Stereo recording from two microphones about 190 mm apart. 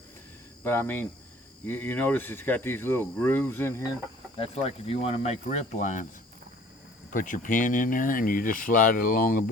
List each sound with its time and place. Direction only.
0.6 s speech: 10° left (ahead or behind)
4.4 s speech: 30° left (ahead or behind)
7.1 s speech: 45° left (ahead or behind)